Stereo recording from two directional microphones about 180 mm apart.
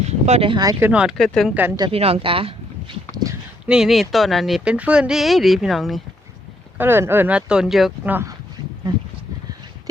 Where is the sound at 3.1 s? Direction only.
20° right (ahead or behind).